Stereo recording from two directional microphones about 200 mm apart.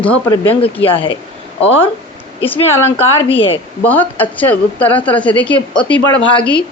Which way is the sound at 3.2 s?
25° left (ahead or behind).